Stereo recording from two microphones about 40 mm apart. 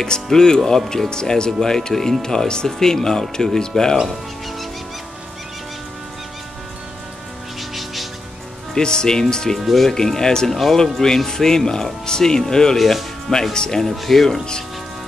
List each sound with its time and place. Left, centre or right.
0.0 s speech: centre
3.9 s music: centre
7.7 s music: centre
8.7 s speech: centre
9.6 s speech: centre
9.8 s speech: centre
12.7 s speech: centre
13.3 s speech: centre
13.8 s speech: centre